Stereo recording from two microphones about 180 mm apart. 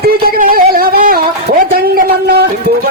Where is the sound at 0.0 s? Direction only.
55° right (ahead or behind).